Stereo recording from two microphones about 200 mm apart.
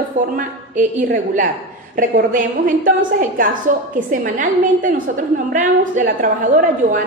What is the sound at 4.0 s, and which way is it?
A woman's voice, 40° right (ahead or behind).